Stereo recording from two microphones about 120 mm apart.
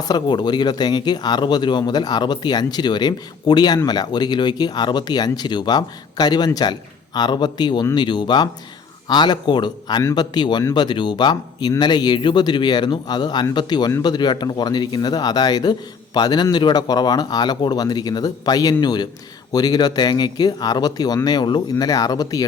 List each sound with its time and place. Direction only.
0.0 s speech: 35° left (ahead or behind)